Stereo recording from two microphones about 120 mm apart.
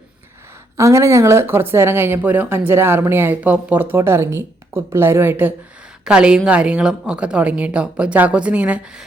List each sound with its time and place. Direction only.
0.8 s a woman's voice: 25° right (ahead or behind); by 9.0 s 10° right (ahead or behind)